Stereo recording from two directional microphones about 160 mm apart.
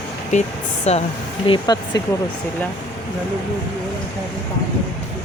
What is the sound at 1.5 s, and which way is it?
Speech, 25° left (ahead or behind).